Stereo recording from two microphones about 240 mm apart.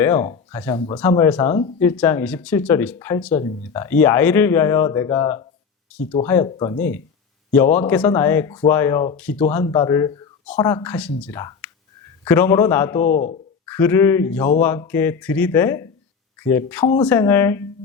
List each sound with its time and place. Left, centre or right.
0.0 s speech: centre
5.9 s speech: centre
13.1 s speech: left
13.7 s speech: centre